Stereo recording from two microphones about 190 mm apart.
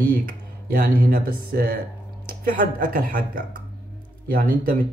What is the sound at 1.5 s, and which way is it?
Speech, 50° right (ahead or behind).